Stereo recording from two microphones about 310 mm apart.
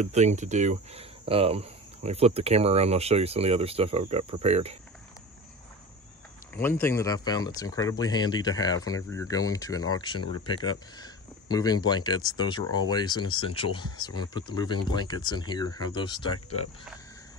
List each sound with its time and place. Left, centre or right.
0.0 s speech: right
6.8 s speech: centre